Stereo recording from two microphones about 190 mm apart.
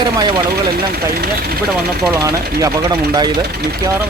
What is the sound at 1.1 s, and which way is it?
Speech, 50° right (ahead or behind).